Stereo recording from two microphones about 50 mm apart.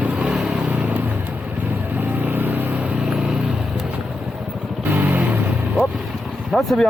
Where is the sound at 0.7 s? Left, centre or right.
Right.